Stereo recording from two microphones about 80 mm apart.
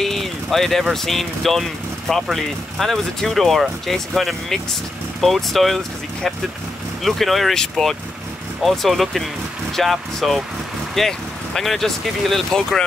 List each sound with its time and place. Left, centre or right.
0.0 s speech: centre
7.0 s speech: centre